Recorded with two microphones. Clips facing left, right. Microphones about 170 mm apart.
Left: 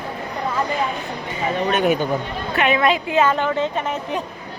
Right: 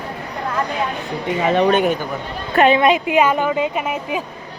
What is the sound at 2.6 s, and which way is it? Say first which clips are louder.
Speech: right 6 dB; 30° right (ahead or behind).